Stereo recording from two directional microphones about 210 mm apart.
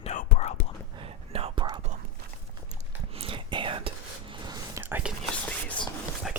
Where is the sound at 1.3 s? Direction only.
30° right (ahead or behind).